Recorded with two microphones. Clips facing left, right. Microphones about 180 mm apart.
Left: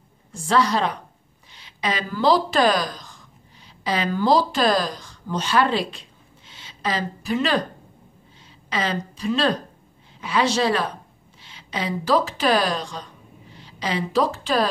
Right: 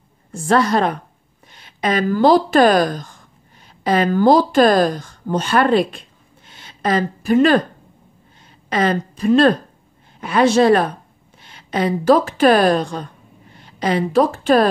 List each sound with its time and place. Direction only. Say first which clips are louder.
0.3 s a woman's voice: right 4 dB; 50° right (ahead or behind)
8.6 s a woman's voice: right 7 dB; 55° right (ahead or behind)